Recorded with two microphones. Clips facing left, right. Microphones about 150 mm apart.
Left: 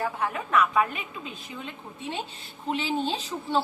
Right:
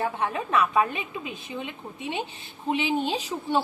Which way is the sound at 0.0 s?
20° right (ahead or behind).